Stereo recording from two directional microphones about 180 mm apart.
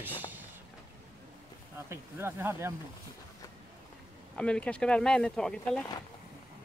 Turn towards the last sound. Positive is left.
turn(degrees=5)  # may be behind; listen again after turning